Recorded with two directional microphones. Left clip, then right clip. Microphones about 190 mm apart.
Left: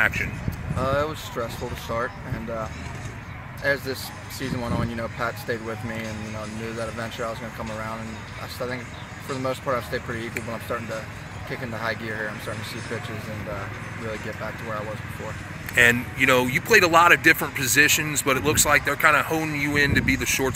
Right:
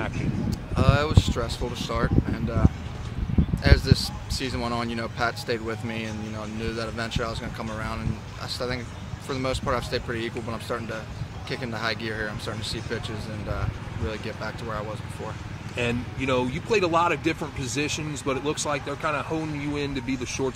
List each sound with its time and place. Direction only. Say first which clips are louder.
0.7 s speech: even; 20° right (ahead or behind)
3.6 s speech: left 1 dB; 20° right (ahead or behind)
9.3 s speech: left 1 dB; 25° right (ahead or behind)
15.7 s speech: left 11 dB; 10° left (ahead or behind)